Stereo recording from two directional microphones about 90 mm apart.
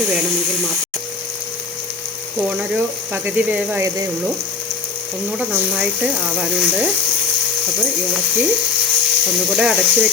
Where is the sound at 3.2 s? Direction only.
15° right (ahead or behind).